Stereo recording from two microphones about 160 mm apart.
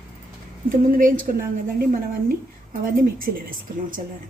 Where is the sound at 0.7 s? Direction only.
60° right (ahead or behind).